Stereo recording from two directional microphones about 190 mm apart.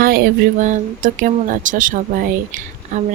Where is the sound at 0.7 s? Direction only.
40° right (ahead or behind).